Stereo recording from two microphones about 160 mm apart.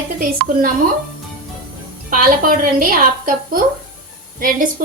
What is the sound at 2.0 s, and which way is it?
A woman's voice, 60° right (ahead or behind).